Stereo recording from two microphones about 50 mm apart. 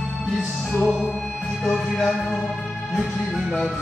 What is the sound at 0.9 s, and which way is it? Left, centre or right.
Music, centre.